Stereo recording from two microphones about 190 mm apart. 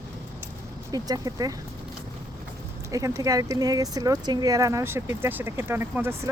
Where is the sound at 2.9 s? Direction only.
20° right (ahead or behind).